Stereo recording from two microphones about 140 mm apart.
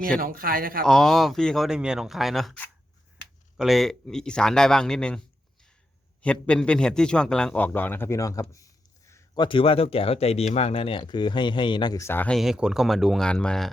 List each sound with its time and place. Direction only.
0.2 s speech: 90° right
0.8 s speech: 5° left (ahead or behind)
6.2 s a man's voice: 10° left (ahead or behind)
9.4 s speech: 35° left (ahead or behind)
12.0 s speech: 15° left (ahead or behind)
12.4 s speech: 5° right (ahead or behind)